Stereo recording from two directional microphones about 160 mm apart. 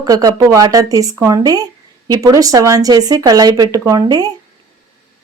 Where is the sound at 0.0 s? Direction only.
25° right (ahead or behind).